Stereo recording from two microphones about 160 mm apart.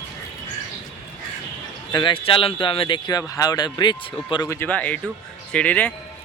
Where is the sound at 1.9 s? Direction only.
30° left (ahead or behind).